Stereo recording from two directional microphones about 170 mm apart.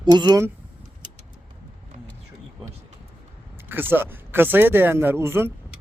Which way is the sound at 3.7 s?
10° right (ahead or behind).